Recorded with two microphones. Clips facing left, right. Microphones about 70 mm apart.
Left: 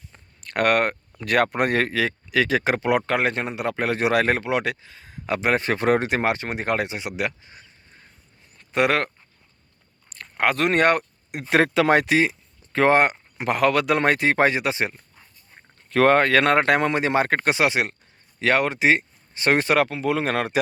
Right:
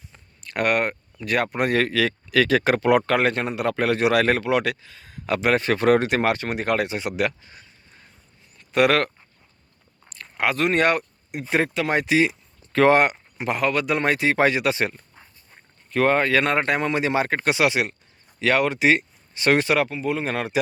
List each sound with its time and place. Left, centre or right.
0.4 s speech: left
6.9 s speech: centre
8.7 s speech: left
10.1 s speech: left
11.5 s speech: left
12.0 s speech: left
13.4 s speech: left
15.9 s speech: left
16.9 s speech: left
19.8 s speech: left